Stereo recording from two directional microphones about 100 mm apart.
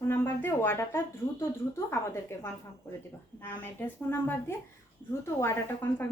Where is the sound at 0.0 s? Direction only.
25° left (ahead or behind).